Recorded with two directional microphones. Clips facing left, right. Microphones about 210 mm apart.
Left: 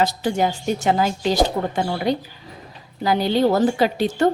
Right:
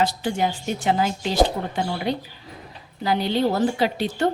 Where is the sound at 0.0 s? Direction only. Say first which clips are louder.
Left 3 dB; 40° left (ahead or behind).